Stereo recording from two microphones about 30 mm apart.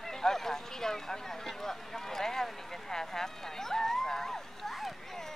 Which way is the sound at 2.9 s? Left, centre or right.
Centre.